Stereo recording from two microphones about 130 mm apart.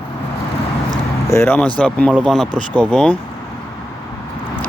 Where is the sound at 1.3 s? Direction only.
20° left (ahead or behind).